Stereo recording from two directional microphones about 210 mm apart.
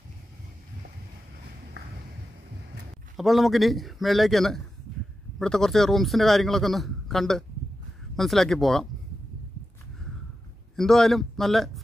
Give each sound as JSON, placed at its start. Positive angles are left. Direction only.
{"t": 3.2, "sound": "a man's voice", "side_deg": 0}
{"t": 10.8, "sound": "a man's voice", "side_deg": 0}